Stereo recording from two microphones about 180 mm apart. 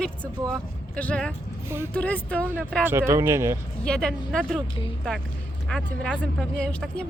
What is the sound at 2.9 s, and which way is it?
Speech, 15° right (ahead or behind).